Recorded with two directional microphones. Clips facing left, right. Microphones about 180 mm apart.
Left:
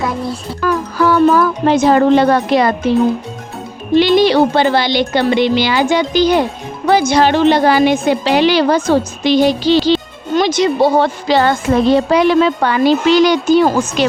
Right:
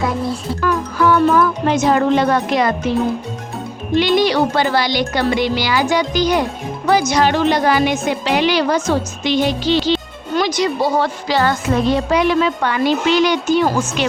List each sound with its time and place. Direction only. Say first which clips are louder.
0.9 s speech: left 3 dB; 35° left (ahead or behind)
3.9 s a woman's voice: left 5 dB; 30° left (ahead or behind)
10.3 s a woman's voice: left 4 dB; 25° left (ahead or behind)